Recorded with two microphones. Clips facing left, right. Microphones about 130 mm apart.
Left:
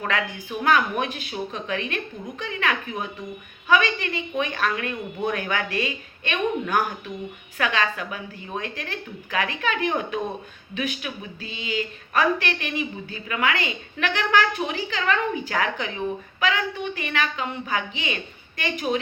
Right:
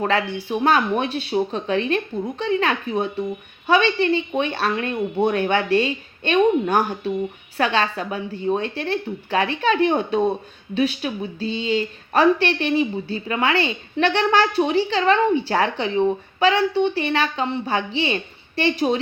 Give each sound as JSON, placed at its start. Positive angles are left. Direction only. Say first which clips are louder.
{"t": 0.0, "sound": "speech", "louder": "right 6 dB", "side_deg": -30}